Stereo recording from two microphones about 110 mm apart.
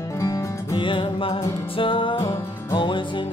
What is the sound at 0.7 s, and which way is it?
Music, 50° left (ahead or behind).